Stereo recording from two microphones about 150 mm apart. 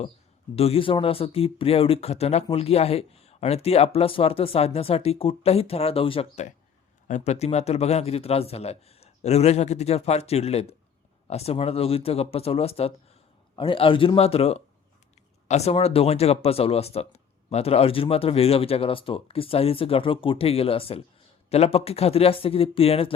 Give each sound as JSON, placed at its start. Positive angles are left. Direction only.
{"t": 0.5, "sound": "a man's voice", "side_deg": 40}